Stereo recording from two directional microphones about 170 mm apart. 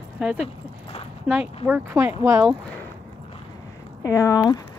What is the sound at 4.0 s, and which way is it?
Speech, 20° left (ahead or behind).